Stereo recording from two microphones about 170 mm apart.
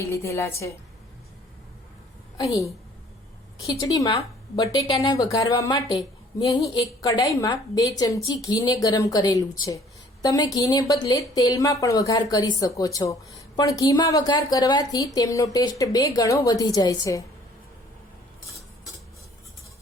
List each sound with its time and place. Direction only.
0.0 s a woman's voice: 15° left (ahead or behind)
2.4 s speech: 20° left (ahead or behind)